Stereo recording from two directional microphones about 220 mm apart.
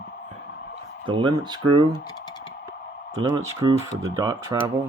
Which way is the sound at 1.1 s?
20° right (ahead or behind).